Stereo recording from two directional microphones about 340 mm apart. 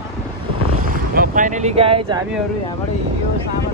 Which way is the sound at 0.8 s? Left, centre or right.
Right.